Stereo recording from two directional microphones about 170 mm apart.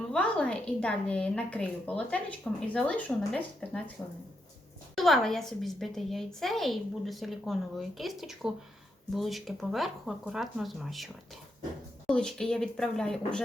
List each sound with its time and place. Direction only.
0.1 s a woman's voice: 5° left (ahead or behind)
4.9 s a woman's voice: centre (ahead or behind)